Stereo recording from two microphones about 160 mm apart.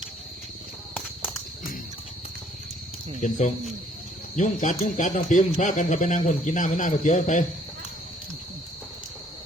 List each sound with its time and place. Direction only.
3.2 s speech: 50° left (ahead or behind)